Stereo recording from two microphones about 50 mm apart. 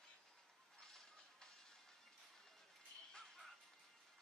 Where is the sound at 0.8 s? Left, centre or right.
Centre.